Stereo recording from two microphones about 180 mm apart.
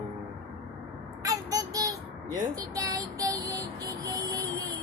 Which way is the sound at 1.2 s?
20° right (ahead or behind).